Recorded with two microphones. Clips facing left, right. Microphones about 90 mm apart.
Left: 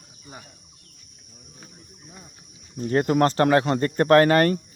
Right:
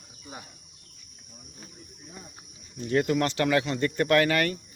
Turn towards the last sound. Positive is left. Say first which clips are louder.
# left 7 dB
turn(degrees=40)  # may be behind; listen again after turning